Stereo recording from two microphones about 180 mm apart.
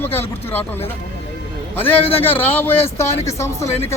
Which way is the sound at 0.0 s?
10° left (ahead or behind).